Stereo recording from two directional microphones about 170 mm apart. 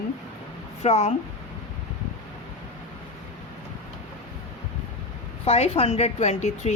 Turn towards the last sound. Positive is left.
turn(degrees=40)  # may be behind; listen again after turning